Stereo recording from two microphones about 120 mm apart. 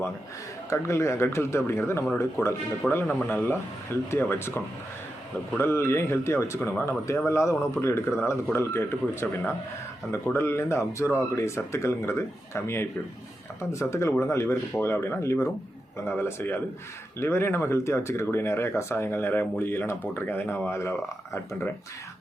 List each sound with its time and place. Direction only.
0.7 s speech: 25° left (ahead or behind)
10.3 s speech: 20° left (ahead or behind)